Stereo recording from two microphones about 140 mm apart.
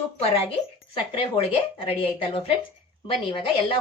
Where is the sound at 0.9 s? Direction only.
40° left (ahead or behind).